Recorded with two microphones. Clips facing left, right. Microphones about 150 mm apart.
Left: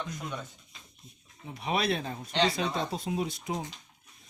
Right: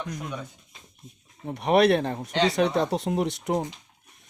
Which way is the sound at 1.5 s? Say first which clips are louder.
Right 10 dB; 65° right (ahead or behind).